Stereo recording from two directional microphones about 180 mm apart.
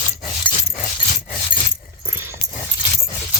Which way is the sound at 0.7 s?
45° left (ahead or behind).